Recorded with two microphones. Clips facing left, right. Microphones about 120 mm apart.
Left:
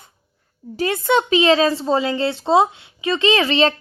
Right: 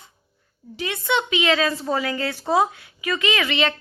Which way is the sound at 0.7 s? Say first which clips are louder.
Left 6 dB; 40° left (ahead or behind).